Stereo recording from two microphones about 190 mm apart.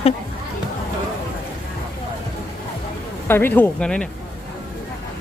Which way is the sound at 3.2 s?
10° left (ahead or behind).